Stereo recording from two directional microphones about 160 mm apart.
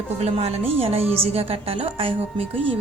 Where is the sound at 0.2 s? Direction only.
40° right (ahead or behind).